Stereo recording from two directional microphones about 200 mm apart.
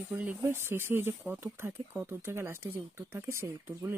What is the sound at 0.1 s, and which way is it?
Speech, 10° right (ahead or behind).